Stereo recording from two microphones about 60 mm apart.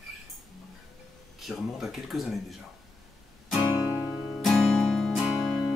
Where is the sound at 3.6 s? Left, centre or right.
Right.